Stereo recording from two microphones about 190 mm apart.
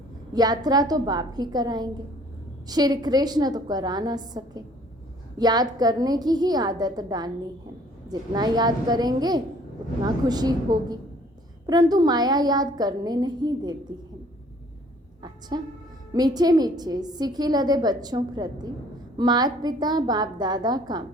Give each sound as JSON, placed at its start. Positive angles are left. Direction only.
{"t": 0.3, "sound": "a woman's voice", "side_deg": -20}
{"t": 15.2, "sound": "a sound", "side_deg": -20}
{"t": 16.1, "sound": "a woman's voice", "side_deg": -20}